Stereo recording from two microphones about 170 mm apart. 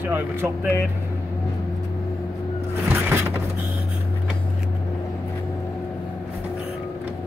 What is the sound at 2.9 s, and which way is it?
Music, 10° right (ahead or behind).